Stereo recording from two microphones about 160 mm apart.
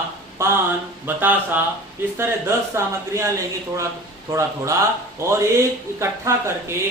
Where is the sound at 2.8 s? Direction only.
20° right (ahead or behind).